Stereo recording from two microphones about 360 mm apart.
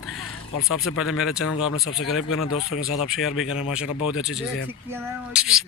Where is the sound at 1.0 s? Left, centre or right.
Centre.